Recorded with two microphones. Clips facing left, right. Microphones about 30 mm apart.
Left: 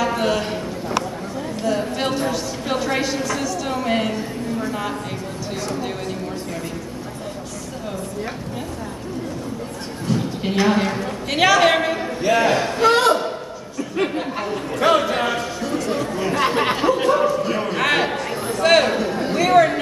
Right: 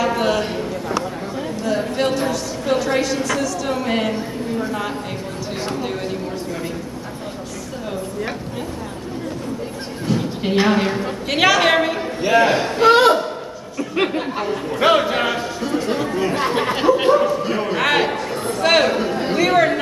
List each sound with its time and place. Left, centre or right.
0.0 s a sound: centre
10.0 s a sound: centre
14.1 s speech: centre
14.8 s speech: right
15.8 s chatter: centre
17.1 s a man's voice: centre
18.9 s speech: right